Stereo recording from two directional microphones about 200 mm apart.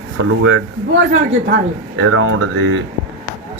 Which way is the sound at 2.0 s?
90° right.